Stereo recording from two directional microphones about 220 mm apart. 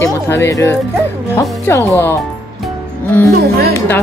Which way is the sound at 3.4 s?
45° right (ahead or behind).